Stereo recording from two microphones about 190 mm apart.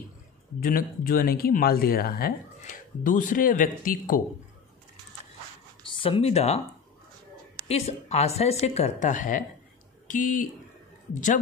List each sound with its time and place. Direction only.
0.6 s speech: 50° left (ahead or behind)
5.9 s speech: 25° left (ahead or behind)
7.6 s a woman's voice: 35° left (ahead or behind)